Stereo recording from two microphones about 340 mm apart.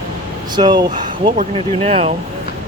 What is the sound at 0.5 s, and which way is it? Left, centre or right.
Speech, centre.